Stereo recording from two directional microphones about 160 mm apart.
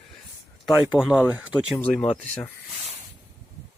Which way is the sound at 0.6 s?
5° right (ahead or behind).